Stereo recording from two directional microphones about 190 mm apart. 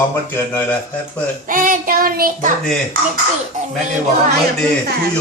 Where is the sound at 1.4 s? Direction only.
45° right (ahead or behind).